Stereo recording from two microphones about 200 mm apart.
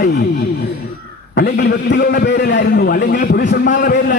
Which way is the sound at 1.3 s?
55° left (ahead or behind).